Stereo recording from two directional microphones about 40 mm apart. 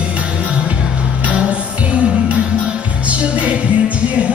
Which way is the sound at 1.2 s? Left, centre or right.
Right.